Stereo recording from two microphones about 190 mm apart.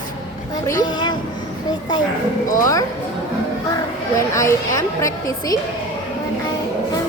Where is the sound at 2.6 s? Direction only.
15° left (ahead or behind).